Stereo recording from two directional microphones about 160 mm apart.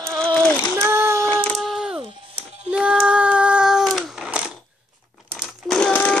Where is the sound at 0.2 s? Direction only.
10° left (ahead or behind).